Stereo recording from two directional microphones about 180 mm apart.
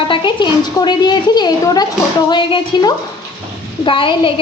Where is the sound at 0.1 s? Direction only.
25° left (ahead or behind).